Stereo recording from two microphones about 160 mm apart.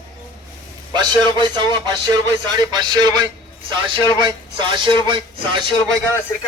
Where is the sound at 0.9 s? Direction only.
25° right (ahead or behind).